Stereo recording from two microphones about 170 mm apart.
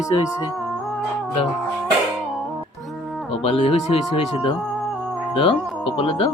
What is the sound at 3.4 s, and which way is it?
Speech, 35° left (ahead or behind).